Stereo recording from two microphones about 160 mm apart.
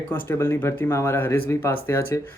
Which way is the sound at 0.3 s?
15° left (ahead or behind).